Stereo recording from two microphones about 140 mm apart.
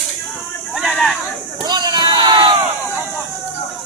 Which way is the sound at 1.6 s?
30° right (ahead or behind).